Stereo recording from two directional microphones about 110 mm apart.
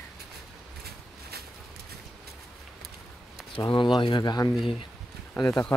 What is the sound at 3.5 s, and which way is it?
Speech, 55° left (ahead or behind).